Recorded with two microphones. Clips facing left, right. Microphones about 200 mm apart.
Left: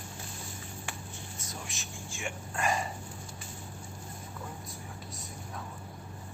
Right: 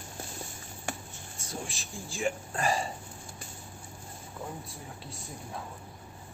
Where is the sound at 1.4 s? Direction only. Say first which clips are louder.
Right 7 dB; 30° right (ahead or behind).